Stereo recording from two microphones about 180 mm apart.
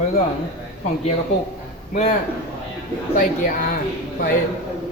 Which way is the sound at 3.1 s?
50° left (ahead or behind).